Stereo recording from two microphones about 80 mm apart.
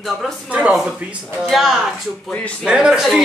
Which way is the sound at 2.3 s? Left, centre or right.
Centre.